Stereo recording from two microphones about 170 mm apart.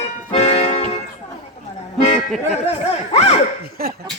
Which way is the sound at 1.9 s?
40° left (ahead or behind).